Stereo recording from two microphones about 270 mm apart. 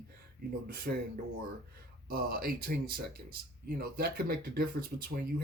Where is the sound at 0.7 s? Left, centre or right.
Right.